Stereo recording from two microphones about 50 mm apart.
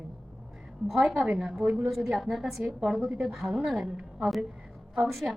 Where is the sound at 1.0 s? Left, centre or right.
Centre.